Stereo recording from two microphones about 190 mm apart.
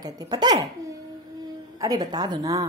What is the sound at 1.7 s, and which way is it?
Speech, 20° right (ahead or behind).